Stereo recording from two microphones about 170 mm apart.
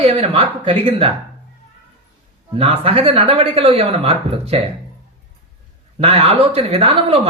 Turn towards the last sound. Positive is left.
turn(degrees=-35)  # may be behind; listen again after turning